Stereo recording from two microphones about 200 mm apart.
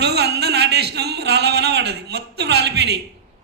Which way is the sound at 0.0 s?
55° right (ahead or behind).